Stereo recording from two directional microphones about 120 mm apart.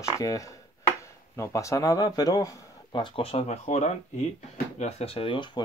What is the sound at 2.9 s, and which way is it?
Speech, 45° left (ahead or behind).